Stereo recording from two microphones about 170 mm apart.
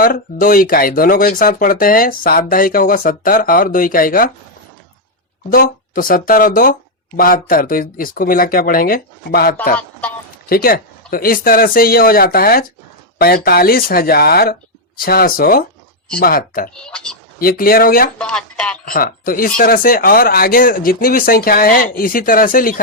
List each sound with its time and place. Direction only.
0.0 s speech: 55° left (ahead or behind)
5.5 s speech: 55° left (ahead or behind)
16.7 s speech: 5° left (ahead or behind)
17.4 s speech: 60° left (ahead or behind)
18.2 s speech: 5° left (ahead or behind)
18.9 s speech: 55° left (ahead or behind)